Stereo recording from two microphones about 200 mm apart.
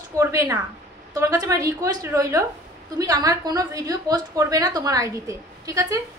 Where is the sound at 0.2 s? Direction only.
15° right (ahead or behind).